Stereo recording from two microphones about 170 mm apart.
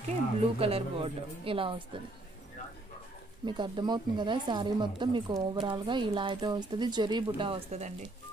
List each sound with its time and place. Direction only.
0.6 s speech: 35° right (ahead or behind)
3.4 s speech: 25° right (ahead or behind)